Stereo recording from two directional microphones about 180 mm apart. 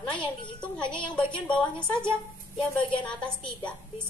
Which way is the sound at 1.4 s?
5° left (ahead or behind).